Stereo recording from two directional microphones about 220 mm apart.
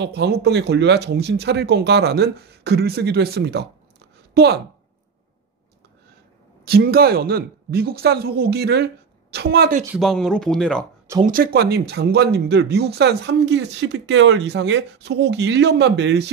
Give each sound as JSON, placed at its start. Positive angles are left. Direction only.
{"t": 0.0, "sound": "a woman's voice", "side_deg": -50}
{"t": 6.6, "sound": "speech", "side_deg": -45}
{"t": 9.9, "sound": "speech", "side_deg": 0}
{"t": 11.2, "sound": "speech", "side_deg": -40}